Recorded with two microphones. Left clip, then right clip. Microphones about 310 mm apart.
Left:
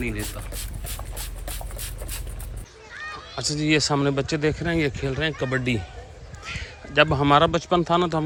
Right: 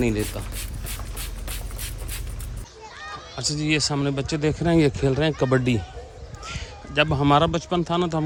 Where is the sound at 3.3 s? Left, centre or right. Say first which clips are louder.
Left 2 dB; centre.